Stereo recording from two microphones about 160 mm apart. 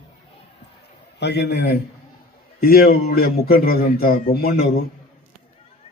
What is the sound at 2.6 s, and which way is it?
A man's voice, 75° left (ahead or behind).